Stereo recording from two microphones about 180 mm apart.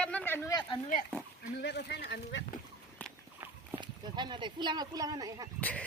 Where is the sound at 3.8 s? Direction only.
25° right (ahead or behind).